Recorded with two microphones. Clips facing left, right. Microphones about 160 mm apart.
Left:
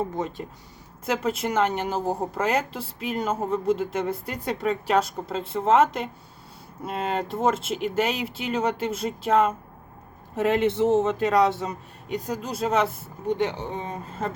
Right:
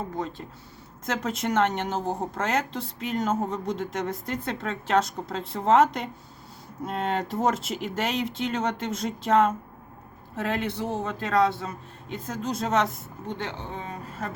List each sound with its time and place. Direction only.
1.0 s speech: 5° left (ahead or behind)
10.3 s a man's voice: 20° left (ahead or behind)
13.4 s speech: 20° left (ahead or behind)